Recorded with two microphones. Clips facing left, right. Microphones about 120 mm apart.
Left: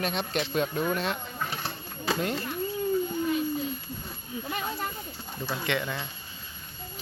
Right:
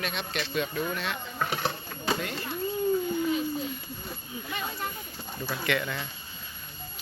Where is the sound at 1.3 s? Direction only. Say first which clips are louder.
Right 4 dB; 70° right (ahead or behind).